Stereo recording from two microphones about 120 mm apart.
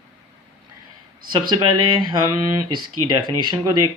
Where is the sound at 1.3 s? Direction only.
40° right (ahead or behind).